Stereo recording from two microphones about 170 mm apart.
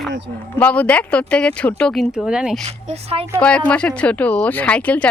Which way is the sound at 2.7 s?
40° right (ahead or behind).